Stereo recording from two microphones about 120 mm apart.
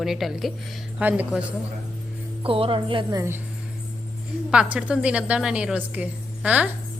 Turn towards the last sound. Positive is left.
turn(degrees=-10)  # may be behind; listen again after turning